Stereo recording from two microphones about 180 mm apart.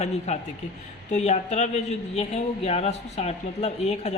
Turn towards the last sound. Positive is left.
turn(degrees=40)  # may be behind; listen again after turning